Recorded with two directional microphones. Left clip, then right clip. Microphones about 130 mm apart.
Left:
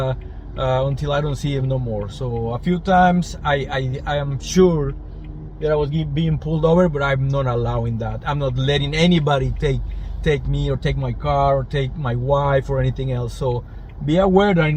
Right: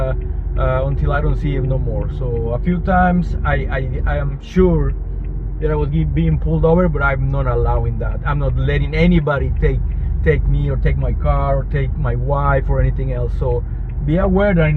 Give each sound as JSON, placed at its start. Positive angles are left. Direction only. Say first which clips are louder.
{"t": 0.0, "sound": "speech", "louder": "right 1 dB", "side_deg": 40}
{"t": 2.5, "sound": "speech", "louder": "left 1 dB", "side_deg": 50}
{"t": 6.4, "sound": "speech", "louder": "right 1 dB", "side_deg": 35}
{"t": 14.1, "sound": "speech", "louder": "left 1 dB", "side_deg": 50}